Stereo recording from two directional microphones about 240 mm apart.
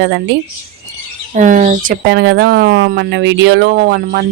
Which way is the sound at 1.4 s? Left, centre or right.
Right.